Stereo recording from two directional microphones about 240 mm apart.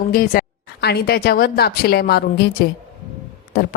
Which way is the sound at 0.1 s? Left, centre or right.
Left.